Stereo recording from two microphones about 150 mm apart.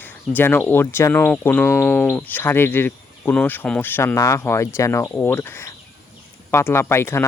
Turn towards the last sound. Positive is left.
turn(degrees=15)  # may be behind; listen again after turning